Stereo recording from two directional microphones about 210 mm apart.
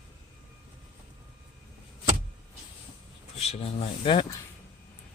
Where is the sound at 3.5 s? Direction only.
30° left (ahead or behind).